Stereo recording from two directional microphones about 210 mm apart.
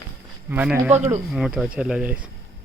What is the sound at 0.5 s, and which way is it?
Speech, 5° right (ahead or behind).